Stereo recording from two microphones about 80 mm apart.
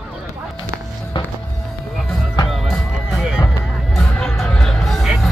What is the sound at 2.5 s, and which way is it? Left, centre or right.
Music, centre.